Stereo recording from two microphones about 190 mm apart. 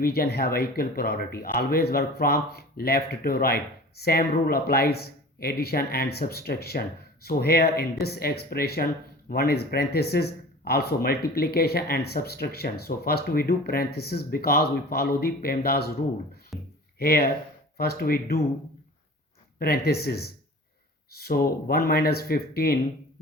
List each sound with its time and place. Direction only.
0.0 s speech: 55° left (ahead or behind)
16.5 s a sound: centre (ahead or behind)
17.0 s speech: 50° left (ahead or behind)
19.5 s speech: 55° left (ahead or behind)